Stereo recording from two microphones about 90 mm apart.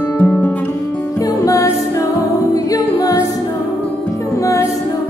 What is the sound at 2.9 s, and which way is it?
A capella, 40° left (ahead or behind).